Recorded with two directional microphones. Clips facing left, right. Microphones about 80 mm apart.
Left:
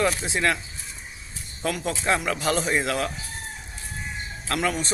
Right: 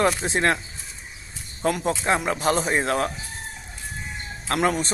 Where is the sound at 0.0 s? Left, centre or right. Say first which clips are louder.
Right 2 dB; right.